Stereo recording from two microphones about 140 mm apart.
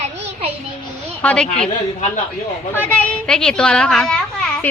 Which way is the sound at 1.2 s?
10° left (ahead or behind).